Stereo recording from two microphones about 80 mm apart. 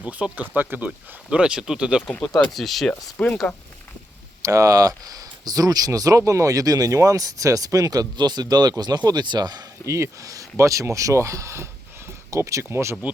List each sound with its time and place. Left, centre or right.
0.0 s speech: centre
2.0 s speech: centre
2.5 s speech: centre
3.2 s speech: centre
4.4 s speech: right
9.8 s speech: right